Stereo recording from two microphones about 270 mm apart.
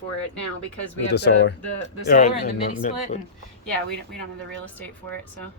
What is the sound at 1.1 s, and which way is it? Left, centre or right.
A man's voice, left.